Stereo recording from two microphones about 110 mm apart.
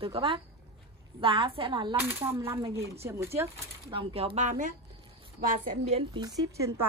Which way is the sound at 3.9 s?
60° right (ahead or behind).